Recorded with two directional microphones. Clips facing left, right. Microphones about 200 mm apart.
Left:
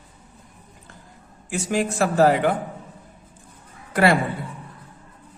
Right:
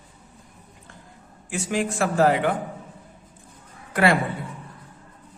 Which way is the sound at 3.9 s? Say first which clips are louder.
Left 2 dB; 40° left (ahead or behind).